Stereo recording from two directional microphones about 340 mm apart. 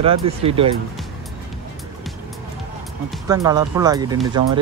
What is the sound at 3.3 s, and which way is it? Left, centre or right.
Speech, centre.